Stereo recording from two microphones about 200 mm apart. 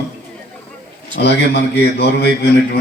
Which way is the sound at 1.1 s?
55° left (ahead or behind).